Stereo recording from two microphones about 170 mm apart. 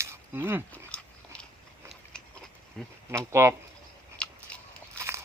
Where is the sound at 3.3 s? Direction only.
15° right (ahead or behind).